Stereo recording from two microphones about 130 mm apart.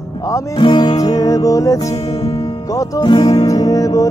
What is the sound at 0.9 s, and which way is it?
Music, 25° left (ahead or behind).